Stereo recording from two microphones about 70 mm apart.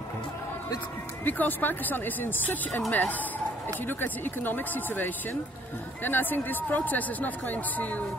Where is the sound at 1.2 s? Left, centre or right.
Left.